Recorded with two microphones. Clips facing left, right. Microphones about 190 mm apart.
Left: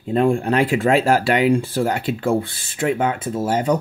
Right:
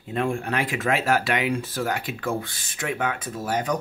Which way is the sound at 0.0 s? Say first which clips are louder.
Left 8 dB; 35° left (ahead or behind).